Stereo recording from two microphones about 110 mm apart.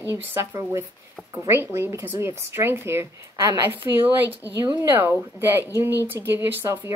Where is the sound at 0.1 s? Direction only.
20° right (ahead or behind).